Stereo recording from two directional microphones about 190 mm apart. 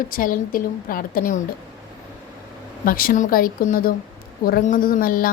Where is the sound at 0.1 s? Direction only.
45° left (ahead or behind).